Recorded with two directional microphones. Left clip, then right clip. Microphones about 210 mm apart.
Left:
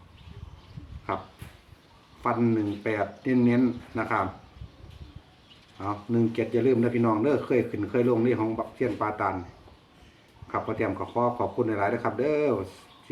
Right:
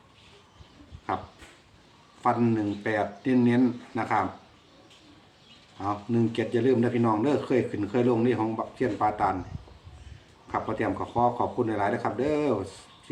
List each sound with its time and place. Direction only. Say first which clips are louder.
2.8 s speech: right 1 dB; 5° right (ahead or behind)
5.7 s speech: even; centre (ahead or behind)
10.5 s a man's voice: even; 5° right (ahead or behind)